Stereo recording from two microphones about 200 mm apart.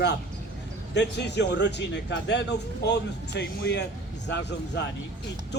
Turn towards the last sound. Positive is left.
turn(degrees=60)  # may be behind; listen again after turning